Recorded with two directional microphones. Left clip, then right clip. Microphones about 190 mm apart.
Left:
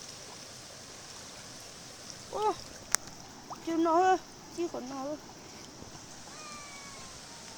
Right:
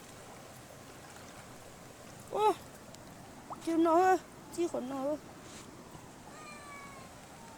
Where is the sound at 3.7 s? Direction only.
25° right (ahead or behind).